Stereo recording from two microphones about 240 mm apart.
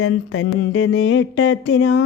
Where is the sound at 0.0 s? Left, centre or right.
Left.